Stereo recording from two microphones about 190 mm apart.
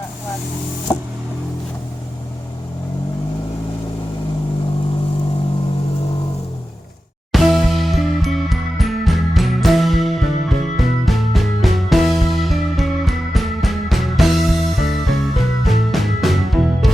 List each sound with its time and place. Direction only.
7.3 s music: centre (ahead or behind)